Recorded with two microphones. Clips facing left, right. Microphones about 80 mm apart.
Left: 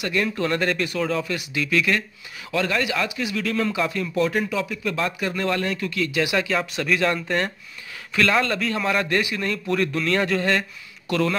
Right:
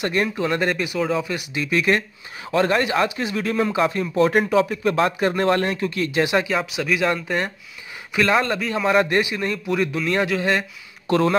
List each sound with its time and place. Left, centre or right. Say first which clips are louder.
0.0 s speech: right 2 dB; right
0.4 s speech: right 1 dB; centre
1.3 s a man's voice: right 1 dB; right
4.2 s speech: right 6 dB; right
6.5 s speech: right 1 dB; centre
8.1 s a man's voice: right 2 dB; centre
8.5 s speech: right 1 dB; centre
8.8 s a man's voice: right 7 dB; right
9.7 s speech: even; centre
11.1 s a man's voice: right 4 dB; right